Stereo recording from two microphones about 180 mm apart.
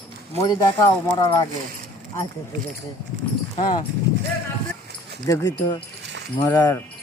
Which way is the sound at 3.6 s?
25° left (ahead or behind).